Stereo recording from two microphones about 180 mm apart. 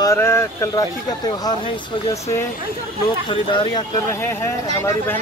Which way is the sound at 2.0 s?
15° left (ahead or behind).